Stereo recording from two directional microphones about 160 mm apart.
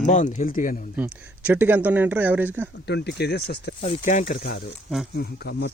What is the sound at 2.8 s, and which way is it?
Speech, 90° left.